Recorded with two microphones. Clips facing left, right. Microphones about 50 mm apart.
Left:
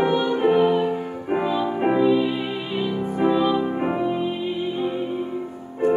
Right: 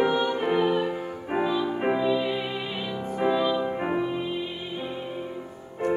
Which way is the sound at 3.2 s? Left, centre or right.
Centre.